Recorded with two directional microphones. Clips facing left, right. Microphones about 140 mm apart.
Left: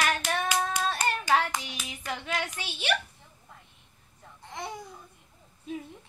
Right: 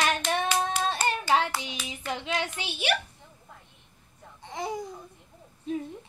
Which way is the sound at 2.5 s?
15° right (ahead or behind).